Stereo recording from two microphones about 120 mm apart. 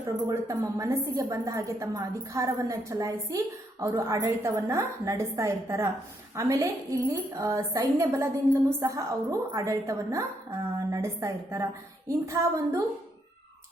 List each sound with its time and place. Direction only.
0.3 s a woman's voice: 25° right (ahead or behind)